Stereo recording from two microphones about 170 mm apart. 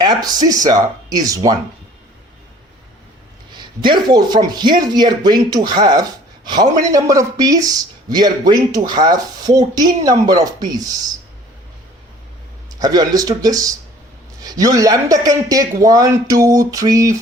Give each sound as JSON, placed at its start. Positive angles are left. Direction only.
{"t": 0.0, "sound": "speech", "side_deg": -25}
{"t": 3.5, "sound": "speech", "side_deg": -25}
{"t": 12.8, "sound": "speech", "side_deg": -25}